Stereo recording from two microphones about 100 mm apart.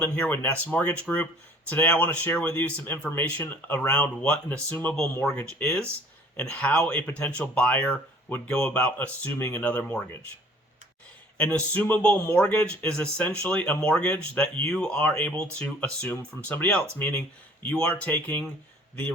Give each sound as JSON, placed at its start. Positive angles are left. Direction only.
{"t": 0.0, "sound": "speech", "side_deg": 15}
{"t": 11.3, "sound": "speech", "side_deg": 15}